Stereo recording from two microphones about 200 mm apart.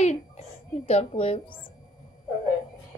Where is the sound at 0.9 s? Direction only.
30° left (ahead or behind).